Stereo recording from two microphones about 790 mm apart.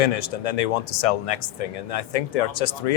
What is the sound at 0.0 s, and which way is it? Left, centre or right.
Speech, left.